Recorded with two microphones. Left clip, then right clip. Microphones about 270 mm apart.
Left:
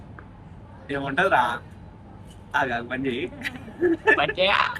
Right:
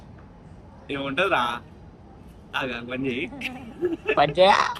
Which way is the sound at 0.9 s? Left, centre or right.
Centre.